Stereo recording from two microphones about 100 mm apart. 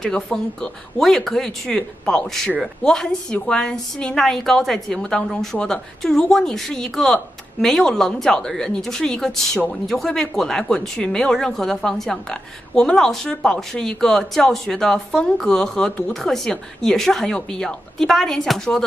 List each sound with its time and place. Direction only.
0.0 s speech: 5° left (ahead or behind)